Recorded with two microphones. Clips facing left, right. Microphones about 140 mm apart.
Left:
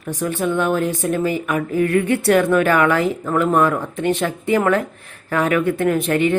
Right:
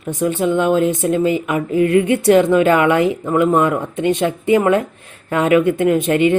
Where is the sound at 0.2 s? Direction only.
20° right (ahead or behind).